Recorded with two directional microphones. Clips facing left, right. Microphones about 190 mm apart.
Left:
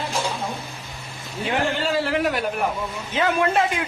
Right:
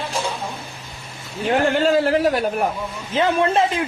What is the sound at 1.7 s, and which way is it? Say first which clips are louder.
Speech: right 6 dB; 45° right (ahead or behind).